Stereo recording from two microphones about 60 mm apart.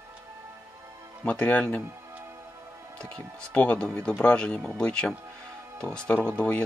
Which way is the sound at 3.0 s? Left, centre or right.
Centre.